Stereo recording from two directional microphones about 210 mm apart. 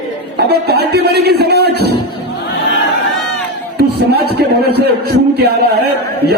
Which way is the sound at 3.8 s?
50° right (ahead or behind).